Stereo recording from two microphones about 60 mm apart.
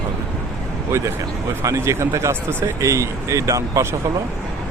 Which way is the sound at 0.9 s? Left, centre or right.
Right.